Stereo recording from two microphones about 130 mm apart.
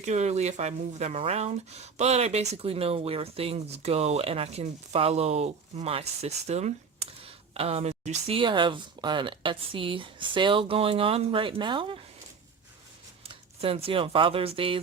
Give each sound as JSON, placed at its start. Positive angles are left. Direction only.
{"t": 0.0, "sound": "speech", "side_deg": -60}
{"t": 8.4, "sound": "speech", "side_deg": -40}
{"t": 13.2, "sound": "speech", "side_deg": -45}